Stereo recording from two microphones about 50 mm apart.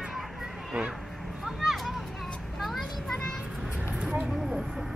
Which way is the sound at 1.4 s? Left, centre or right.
Centre.